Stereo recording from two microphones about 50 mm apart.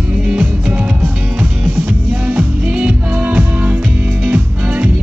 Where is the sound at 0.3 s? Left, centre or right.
Right.